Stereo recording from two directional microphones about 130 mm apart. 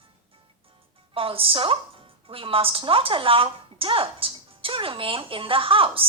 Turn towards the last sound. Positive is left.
turn(degrees=-45)  # may be behind; listen again after turning